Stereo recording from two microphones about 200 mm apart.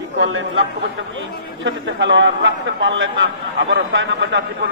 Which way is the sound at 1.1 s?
70° right (ahead or behind).